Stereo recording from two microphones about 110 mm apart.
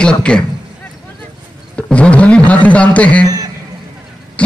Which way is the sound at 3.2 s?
30° right (ahead or behind).